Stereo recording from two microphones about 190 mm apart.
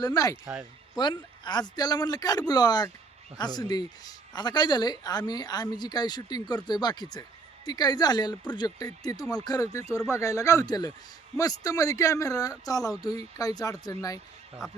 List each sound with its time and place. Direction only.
0.0 s a man's voice: 20° left (ahead or behind)